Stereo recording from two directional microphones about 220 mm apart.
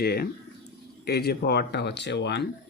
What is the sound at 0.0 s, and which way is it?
Speech, 45° left (ahead or behind).